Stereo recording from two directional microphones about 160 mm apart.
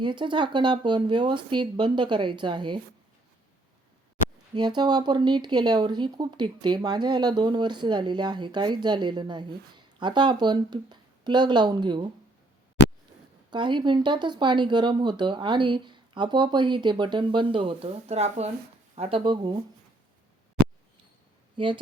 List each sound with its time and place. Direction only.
0.0 s speech: 30° right (ahead or behind)
4.5 s speech: 30° right (ahead or behind)
12.8 s a sound: 90° left
13.5 s speech: 30° right (ahead or behind)